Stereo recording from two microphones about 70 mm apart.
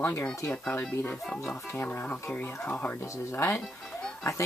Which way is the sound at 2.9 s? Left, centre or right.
Left.